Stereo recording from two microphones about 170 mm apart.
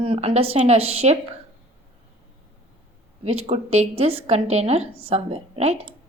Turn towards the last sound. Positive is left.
turn(degrees=-40)  # may be behind; listen again after turning